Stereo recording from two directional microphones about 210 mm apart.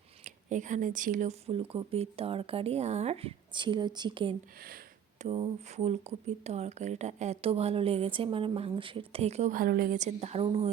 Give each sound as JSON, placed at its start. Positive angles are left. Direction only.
{"t": 0.3, "sound": "speech", "side_deg": -35}